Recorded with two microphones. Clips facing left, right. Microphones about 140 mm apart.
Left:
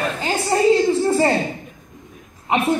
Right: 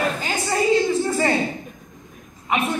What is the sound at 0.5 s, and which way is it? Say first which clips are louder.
Speech: left 4 dB; 30° left (ahead or behind).